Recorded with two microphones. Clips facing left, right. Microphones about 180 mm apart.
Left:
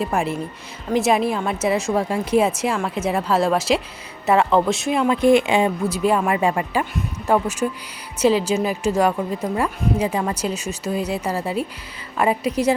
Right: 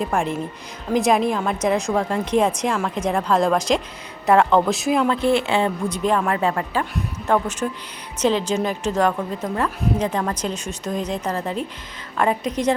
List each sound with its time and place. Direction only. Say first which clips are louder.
0.0 s a woman's voice: even; 5° left (ahead or behind)
5.0 s speech: left 4 dB; 15° left (ahead or behind)